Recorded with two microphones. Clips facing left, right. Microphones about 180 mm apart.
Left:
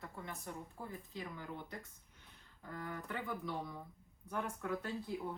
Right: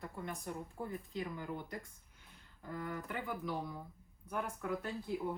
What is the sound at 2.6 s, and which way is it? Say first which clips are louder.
A woman's voice: right 3 dB; 5° right (ahead or behind).